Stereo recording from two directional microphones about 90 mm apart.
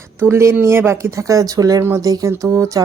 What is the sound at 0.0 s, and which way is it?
Speech, 30° right (ahead or behind).